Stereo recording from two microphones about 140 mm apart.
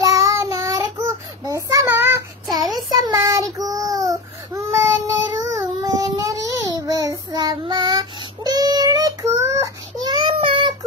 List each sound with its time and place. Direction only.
0.0 s child singing: 25° right (ahead or behind)
10.0 s child singing: 35° right (ahead or behind)